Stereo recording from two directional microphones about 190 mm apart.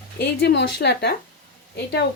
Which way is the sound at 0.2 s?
60° left (ahead or behind).